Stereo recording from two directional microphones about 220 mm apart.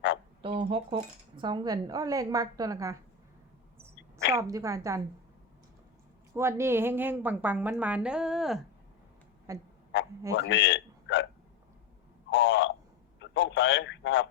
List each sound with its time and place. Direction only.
0.4 s speech: 25° right (ahead or behind)
4.4 s speech: 15° right (ahead or behind)
6.3 s speech: 10° right (ahead or behind)
9.5 s speech: 15° right (ahead or behind)
10.3 s a man's voice: 55° left (ahead or behind)
12.3 s a sound: 55° left (ahead or behind)